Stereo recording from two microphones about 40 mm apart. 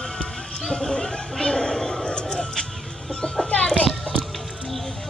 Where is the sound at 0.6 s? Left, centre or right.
Centre.